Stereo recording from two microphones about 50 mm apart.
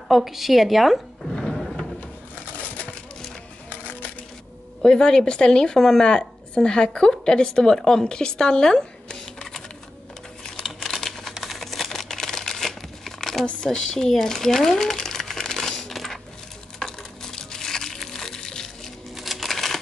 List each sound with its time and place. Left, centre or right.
0.1 s a woman's voice: centre
1.3 s a sound: centre
3.7 s music: left
4.8 s a woman's voice: centre
10.6 s a sound: centre
11.4 s camera: centre
13.5 s crumpling: centre
16.8 s music: centre
19.1 s a sound: centre